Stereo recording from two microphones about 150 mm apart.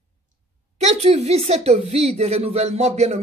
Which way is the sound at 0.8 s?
50° right (ahead or behind).